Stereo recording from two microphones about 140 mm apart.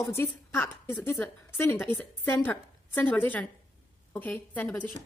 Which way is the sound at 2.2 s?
15° left (ahead or behind).